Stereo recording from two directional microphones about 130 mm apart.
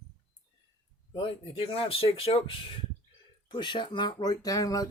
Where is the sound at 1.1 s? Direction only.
45° left (ahead or behind).